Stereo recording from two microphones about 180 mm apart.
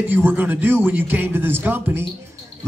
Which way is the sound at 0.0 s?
10° right (ahead or behind).